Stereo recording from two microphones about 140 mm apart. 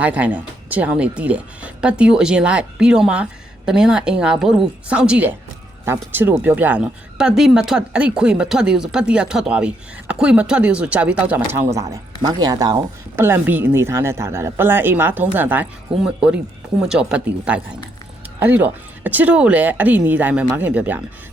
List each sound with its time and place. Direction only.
0.0 s a woman's voice: 10° right (ahead or behind)
11.7 s speech: 25° right (ahead or behind)